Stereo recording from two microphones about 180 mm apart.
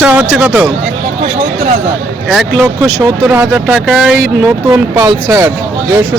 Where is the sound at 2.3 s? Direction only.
5° right (ahead or behind).